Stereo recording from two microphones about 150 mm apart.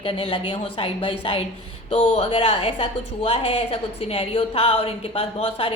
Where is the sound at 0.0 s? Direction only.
35° left (ahead or behind).